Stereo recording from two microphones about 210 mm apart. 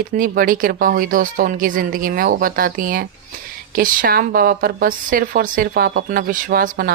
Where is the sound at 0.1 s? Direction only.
40° right (ahead or behind).